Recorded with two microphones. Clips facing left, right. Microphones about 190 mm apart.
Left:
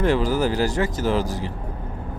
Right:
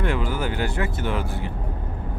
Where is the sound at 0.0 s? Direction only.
40° left (ahead or behind).